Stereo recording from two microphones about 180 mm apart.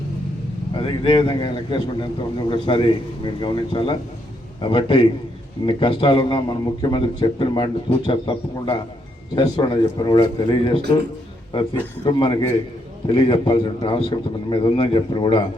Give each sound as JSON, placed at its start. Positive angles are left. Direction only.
{"t": 0.7, "sound": "a man's voice", "side_deg": 30}
{"t": 12.0, "sound": "a man's voice", "side_deg": 25}